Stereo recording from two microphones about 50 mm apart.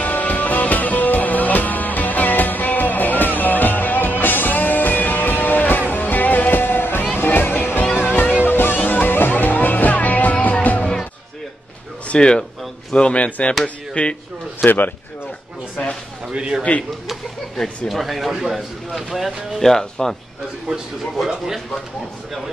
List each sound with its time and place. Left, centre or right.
0.0 s music: left
12.1 s speech: centre
14.6 s speech: left
16.3 s a man's voice: centre
17.6 s speech: centre
19.6 s speech: centre